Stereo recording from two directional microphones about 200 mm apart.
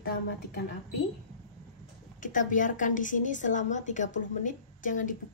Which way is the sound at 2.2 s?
40° left (ahead or behind).